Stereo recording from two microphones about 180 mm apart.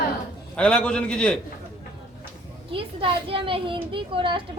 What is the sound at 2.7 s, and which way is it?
A child's voice, 30° right (ahead or behind).